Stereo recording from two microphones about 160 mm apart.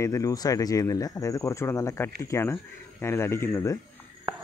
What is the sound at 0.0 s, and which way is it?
Speech, 20° left (ahead or behind).